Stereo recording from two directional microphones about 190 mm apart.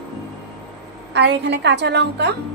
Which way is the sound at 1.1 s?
65° right (ahead or behind).